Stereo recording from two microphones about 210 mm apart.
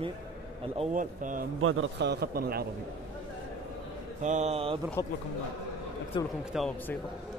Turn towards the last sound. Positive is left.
turn(degrees=0)  # may be behind; listen again after turning